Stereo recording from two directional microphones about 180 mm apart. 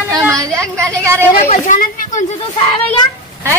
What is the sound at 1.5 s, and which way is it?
Speech, 45° left (ahead or behind).